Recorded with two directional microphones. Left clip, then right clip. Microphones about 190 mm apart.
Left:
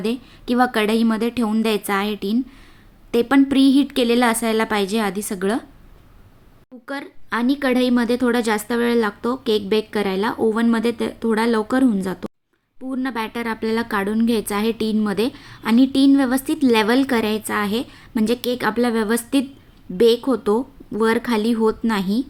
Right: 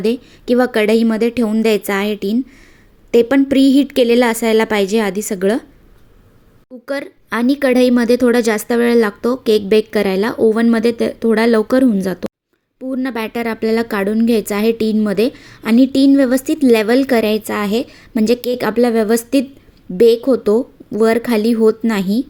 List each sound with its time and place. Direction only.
0.0 s a woman's voice: 15° right (ahead or behind)
6.8 s a woman's voice: 25° right (ahead or behind)